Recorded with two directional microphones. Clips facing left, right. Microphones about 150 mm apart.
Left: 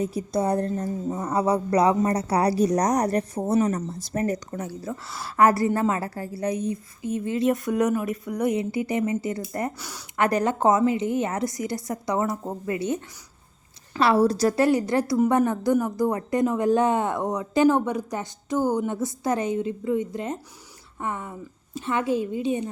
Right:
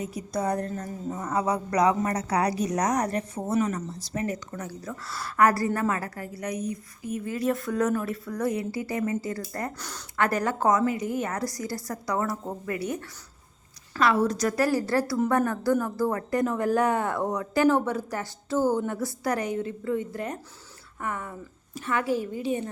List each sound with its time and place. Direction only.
0.0 s speech: 30° left (ahead or behind)
4.5 s speech: 25° left (ahead or behind)
9.7 s speech: 10° left (ahead or behind)
14.0 s speech: 35° left (ahead or behind)